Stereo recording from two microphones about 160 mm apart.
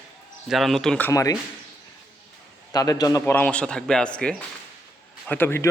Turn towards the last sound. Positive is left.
turn(degrees=15)  # may be behind; listen again after turning